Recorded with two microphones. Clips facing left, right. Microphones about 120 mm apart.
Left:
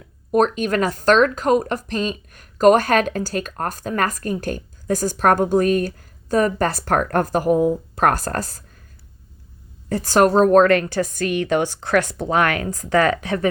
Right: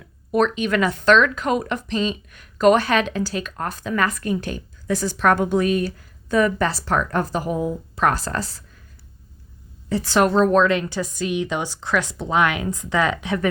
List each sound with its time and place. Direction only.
0.3 s speech: 45° left (ahead or behind)
9.9 s speech: 45° left (ahead or behind)